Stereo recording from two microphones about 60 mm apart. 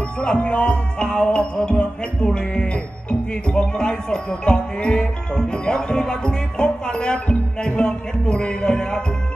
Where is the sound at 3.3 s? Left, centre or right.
Centre.